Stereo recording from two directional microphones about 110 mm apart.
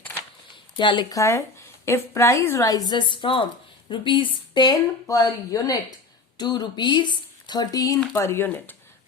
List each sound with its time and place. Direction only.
0.8 s a woman's voice: 45° left (ahead or behind)
1.1 s a woman's voice: 25° left (ahead or behind)
2.6 s a woman's voice: 35° left (ahead or behind)
8.1 s speech: 25° left (ahead or behind)